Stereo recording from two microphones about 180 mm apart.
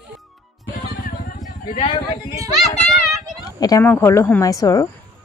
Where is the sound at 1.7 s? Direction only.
25° left (ahead or behind).